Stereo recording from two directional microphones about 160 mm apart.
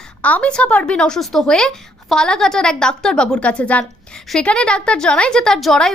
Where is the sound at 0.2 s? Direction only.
10° left (ahead or behind).